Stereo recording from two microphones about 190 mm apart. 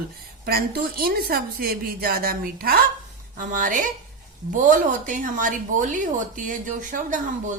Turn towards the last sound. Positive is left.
turn(degrees=-40)  # may be behind; listen again after turning